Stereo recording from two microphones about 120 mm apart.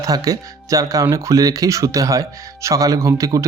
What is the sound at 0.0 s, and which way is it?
Speech, 30° right (ahead or behind).